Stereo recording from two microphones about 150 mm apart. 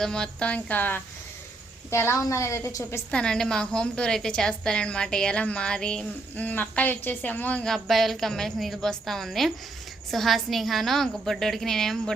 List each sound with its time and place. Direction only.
0.0 s a woman's voice: 5° left (ahead or behind)
3.1 s a woman's voice: 5° left (ahead or behind)